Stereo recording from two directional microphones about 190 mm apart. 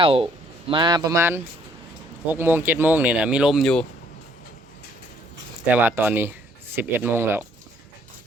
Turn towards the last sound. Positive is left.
turn(degrees=-10)  # may be behind; listen again after turning